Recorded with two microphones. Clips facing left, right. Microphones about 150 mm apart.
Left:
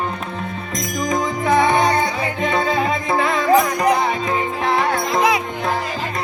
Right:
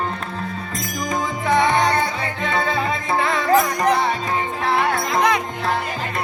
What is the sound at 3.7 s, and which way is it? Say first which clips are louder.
Music: left 1 dB; 10° left (ahead or behind).